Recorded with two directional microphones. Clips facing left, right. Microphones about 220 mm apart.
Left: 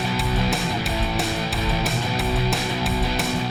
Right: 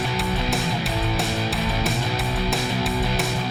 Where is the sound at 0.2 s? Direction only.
Centre (ahead or behind).